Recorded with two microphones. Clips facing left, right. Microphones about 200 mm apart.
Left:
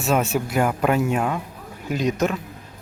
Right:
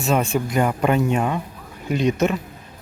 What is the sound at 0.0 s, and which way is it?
Speech, 5° left (ahead or behind).